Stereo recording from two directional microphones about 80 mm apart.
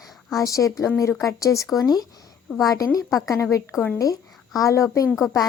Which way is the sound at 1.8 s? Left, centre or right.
Left.